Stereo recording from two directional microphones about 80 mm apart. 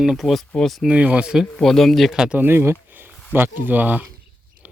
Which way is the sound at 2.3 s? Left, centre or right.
Right.